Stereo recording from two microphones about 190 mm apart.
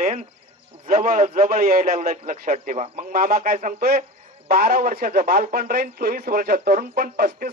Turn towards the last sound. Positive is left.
turn(degrees=-50)  # may be behind; listen again after turning